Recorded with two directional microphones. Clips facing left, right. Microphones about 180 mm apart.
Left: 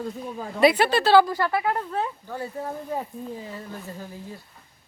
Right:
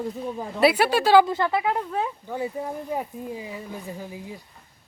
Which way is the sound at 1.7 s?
5° right (ahead or behind).